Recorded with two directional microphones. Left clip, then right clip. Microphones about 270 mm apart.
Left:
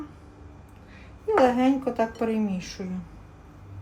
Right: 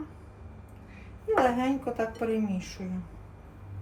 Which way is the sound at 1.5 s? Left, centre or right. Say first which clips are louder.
Left 6 dB; left.